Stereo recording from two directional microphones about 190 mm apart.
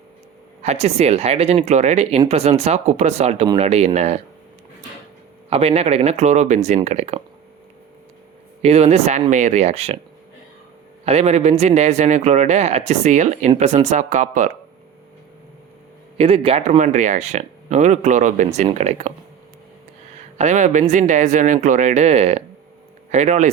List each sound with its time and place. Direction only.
0.6 s speech: 35° right (ahead or behind)
5.5 s speech: 35° right (ahead or behind)
8.6 s speech: 35° right (ahead or behind)
11.0 s speech: 35° right (ahead or behind)
16.1 s speech: 30° right (ahead or behind)
20.4 s speech: 40° right (ahead or behind)